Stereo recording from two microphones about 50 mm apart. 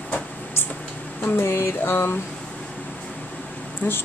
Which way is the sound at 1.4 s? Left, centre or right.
Left.